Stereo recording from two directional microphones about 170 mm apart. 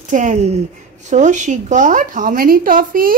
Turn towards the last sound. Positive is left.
turn(degrees=-55)  # may be behind; listen again after turning